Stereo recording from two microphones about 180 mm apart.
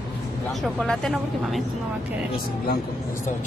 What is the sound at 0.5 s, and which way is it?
A woman's voice, centre (ahead or behind).